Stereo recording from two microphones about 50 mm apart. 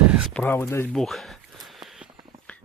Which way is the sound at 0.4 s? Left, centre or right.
Centre.